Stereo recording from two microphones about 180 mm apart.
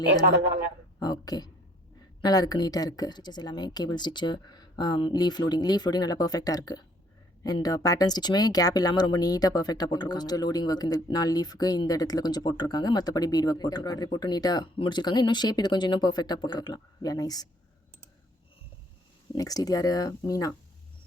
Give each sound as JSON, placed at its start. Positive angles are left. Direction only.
{"t": 1.0, "sound": "speech", "side_deg": 20}
{"t": 19.3, "sound": "speech", "side_deg": 20}